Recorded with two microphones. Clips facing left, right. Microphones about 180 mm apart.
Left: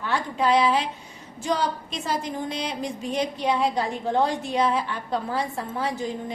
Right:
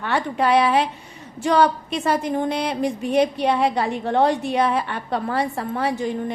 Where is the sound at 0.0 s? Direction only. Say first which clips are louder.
Right 3 dB; 65° right (ahead or behind).